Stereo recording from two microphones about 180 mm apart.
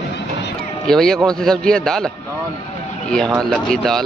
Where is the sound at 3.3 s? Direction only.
Centre (ahead or behind).